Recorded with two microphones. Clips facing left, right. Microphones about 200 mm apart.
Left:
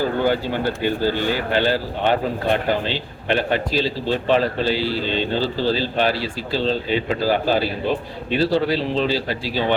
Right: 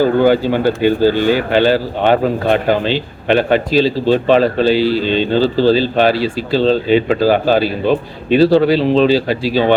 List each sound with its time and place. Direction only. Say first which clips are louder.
0.0 s speech: right 8 dB; 90° right